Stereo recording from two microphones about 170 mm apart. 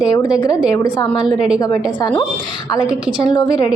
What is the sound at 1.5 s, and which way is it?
Speech, 25° left (ahead or behind).